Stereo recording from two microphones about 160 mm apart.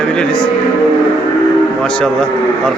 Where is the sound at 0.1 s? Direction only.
5° left (ahead or behind).